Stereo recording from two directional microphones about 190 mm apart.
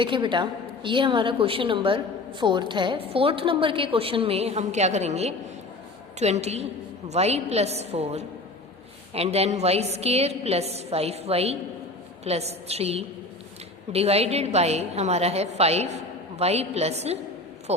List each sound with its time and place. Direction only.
0.0 s a woman's voice: 25° right (ahead or behind)